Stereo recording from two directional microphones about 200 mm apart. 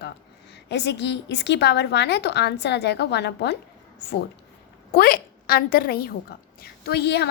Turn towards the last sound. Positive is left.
turn(degrees=55)  # may be behind; listen again after turning